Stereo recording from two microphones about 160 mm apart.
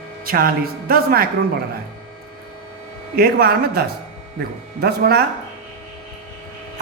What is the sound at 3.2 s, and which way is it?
Speech, 70° right (ahead or behind).